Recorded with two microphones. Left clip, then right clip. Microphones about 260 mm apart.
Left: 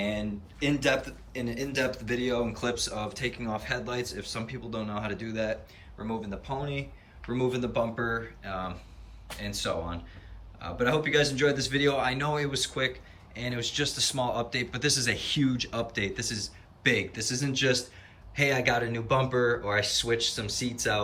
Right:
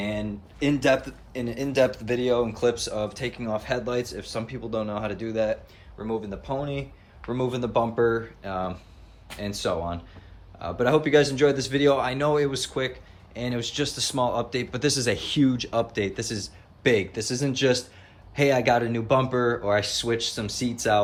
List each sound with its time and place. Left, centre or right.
0.0 s speech: centre